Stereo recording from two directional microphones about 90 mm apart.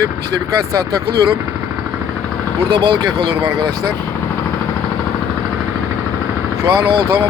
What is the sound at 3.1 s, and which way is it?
Speech, 75° right (ahead or behind).